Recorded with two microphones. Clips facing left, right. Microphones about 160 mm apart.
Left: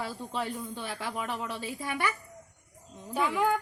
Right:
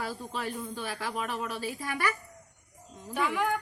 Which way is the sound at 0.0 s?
25° left (ahead or behind).